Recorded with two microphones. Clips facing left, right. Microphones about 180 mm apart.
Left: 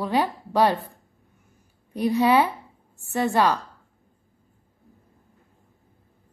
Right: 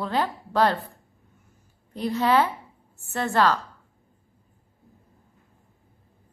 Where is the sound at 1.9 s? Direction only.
15° left (ahead or behind).